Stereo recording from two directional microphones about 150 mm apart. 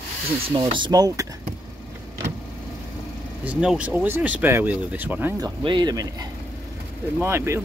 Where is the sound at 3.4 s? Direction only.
5° right (ahead or behind).